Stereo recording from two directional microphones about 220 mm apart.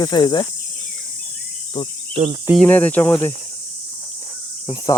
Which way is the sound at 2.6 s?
5° left (ahead or behind).